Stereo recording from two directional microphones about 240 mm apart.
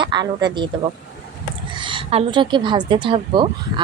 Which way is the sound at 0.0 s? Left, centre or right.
Centre.